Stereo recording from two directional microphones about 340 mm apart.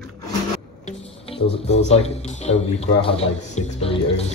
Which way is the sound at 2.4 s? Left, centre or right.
Centre.